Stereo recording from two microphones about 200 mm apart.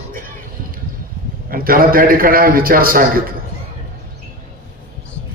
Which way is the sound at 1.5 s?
45° right (ahead or behind).